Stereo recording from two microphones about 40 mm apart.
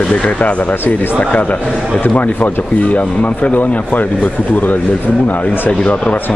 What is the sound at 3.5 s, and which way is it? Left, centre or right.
Speech, left.